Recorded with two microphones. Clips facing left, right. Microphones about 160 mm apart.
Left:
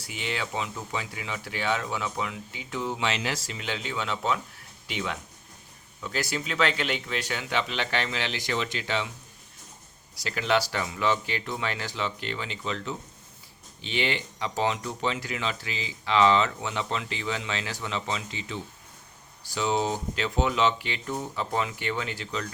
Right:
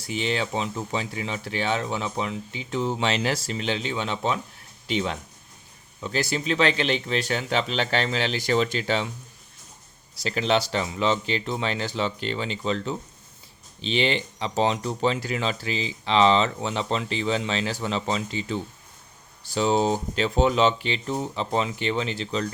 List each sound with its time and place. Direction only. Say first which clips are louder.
0.1 s speech: right 6 dB; 30° right (ahead or behind)
10.2 s speech: right 3 dB; 25° right (ahead or behind)